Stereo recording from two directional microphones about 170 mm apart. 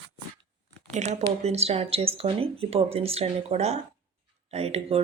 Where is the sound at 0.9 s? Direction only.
40° right (ahead or behind).